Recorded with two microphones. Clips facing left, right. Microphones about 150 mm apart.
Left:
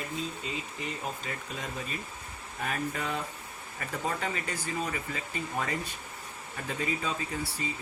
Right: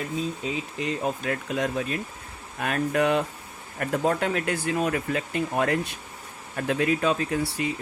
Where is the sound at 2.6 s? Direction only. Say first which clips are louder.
Right 9 dB; 75° right (ahead or behind).